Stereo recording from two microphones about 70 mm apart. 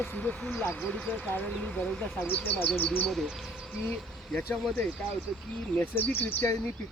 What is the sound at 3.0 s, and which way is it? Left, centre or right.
Speech, centre.